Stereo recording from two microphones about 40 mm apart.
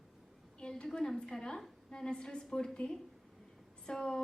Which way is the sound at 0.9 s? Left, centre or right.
Centre.